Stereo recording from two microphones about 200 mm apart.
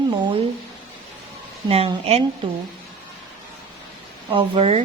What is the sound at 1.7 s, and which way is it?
Speech, 30° right (ahead or behind).